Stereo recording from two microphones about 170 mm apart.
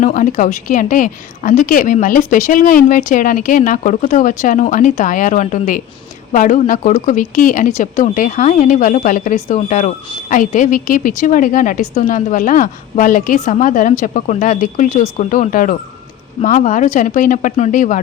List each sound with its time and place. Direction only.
0.0 s a woman's voice: 50° left (ahead or behind)